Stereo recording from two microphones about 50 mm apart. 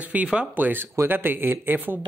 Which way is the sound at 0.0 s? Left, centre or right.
Right.